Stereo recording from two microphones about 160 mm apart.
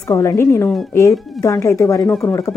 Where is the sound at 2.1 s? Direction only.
5° left (ahead or behind).